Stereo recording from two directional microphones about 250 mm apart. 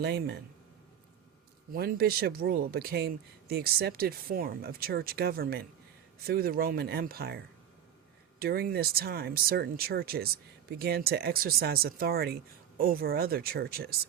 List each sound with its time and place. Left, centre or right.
0.0 s speech: right
1.7 s speech: right